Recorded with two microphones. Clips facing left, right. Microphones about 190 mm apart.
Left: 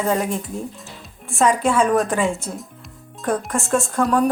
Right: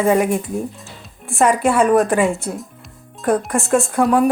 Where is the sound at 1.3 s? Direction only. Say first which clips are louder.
Right 2 dB; centre (ahead or behind).